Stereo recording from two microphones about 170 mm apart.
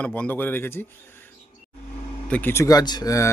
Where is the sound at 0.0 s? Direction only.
10° left (ahead or behind).